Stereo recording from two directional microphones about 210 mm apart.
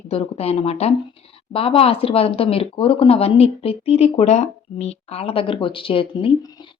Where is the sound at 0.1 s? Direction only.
30° left (ahead or behind).